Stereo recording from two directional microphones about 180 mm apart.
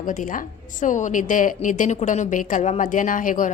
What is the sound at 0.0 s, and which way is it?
A woman's voice, 45° left (ahead or behind).